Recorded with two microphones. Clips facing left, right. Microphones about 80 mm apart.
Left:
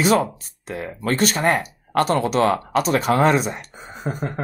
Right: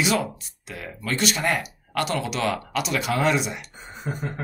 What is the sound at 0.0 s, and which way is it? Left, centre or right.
Speech, left.